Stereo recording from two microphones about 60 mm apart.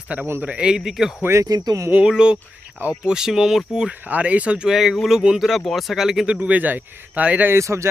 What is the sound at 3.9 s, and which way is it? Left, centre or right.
Speech, right.